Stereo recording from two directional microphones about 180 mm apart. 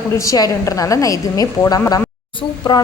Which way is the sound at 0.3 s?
20° left (ahead or behind).